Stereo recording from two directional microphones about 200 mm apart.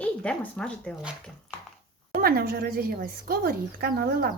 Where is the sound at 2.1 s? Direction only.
50° right (ahead or behind).